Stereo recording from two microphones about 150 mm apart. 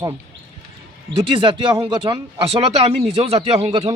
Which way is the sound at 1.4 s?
35° right (ahead or behind).